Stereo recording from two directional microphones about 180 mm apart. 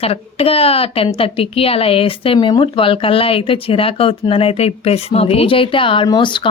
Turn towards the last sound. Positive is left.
turn(degrees=25)  # may be behind; listen again after turning